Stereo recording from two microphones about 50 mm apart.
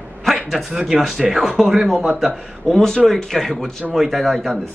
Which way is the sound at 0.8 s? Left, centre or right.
Centre.